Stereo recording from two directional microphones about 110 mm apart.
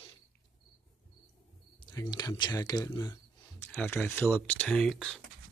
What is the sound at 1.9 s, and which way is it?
Speech, 35° left (ahead or behind).